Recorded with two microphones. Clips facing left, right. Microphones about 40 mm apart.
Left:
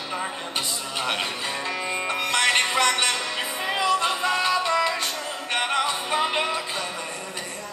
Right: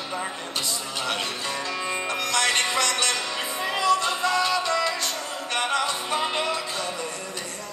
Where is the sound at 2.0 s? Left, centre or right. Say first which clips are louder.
Left 2 dB; left.